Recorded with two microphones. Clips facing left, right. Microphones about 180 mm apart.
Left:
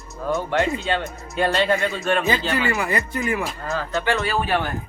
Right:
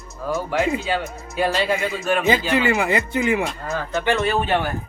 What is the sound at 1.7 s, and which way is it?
Speech, 15° right (ahead or behind).